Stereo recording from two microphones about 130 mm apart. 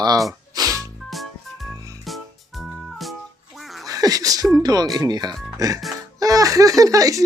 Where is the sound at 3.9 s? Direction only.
30° right (ahead or behind).